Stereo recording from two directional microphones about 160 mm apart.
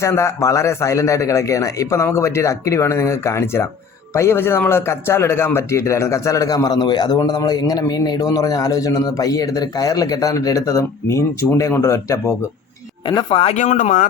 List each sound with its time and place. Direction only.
0.0 s speech: 15° left (ahead or behind)
13.1 s speech: 30° left (ahead or behind); by 14.1 s 55° left (ahead or behind)